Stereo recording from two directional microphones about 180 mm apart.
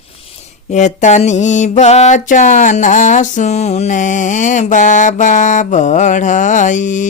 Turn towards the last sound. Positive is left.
turn(degrees=45)  # may be behind; listen again after turning